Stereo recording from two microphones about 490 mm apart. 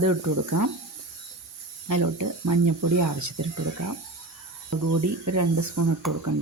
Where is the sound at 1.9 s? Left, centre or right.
Right.